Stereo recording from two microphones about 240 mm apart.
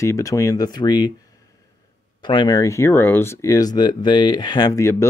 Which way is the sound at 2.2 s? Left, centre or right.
Centre.